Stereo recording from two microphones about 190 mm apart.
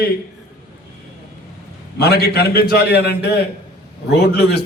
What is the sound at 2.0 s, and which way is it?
A man's voice, 60° left (ahead or behind).